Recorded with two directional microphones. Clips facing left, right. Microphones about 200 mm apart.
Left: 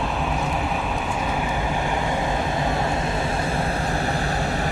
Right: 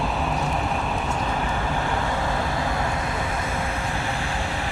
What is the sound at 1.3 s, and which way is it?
Vehicle, 15° left (ahead or behind).